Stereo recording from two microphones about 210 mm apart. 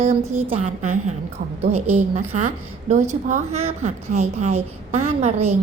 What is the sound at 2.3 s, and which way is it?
A woman's voice, 35° right (ahead or behind).